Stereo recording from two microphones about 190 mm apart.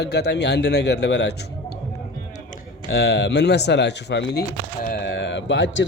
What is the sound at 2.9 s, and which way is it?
A man's voice, 60° left (ahead or behind).